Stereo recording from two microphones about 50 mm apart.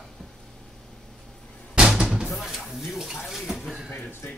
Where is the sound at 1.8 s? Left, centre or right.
Centre.